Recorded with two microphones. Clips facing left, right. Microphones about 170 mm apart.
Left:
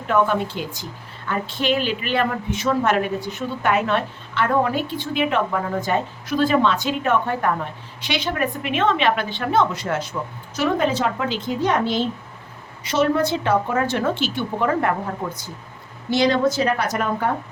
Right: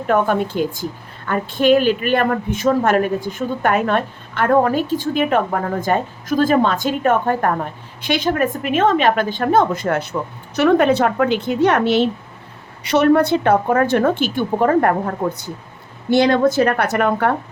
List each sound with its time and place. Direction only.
0.1 s a woman's voice: 50° right (ahead or behind)
16.0 s a woman's voice: 60° right (ahead or behind)